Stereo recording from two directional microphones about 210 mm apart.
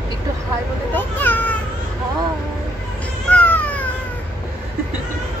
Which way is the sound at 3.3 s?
5° left (ahead or behind).